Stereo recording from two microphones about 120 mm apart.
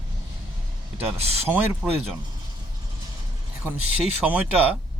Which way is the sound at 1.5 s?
15° right (ahead or behind).